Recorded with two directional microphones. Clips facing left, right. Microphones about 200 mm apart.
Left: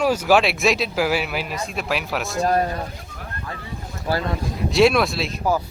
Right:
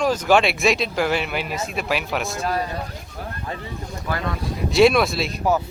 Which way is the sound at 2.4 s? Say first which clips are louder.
Left 8 dB; 45° left (ahead or behind).